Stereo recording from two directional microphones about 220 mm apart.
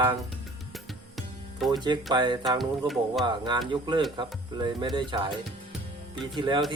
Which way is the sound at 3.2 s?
20° right (ahead or behind).